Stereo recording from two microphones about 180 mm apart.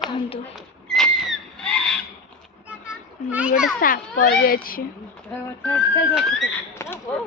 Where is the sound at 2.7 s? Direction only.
10° right (ahead or behind).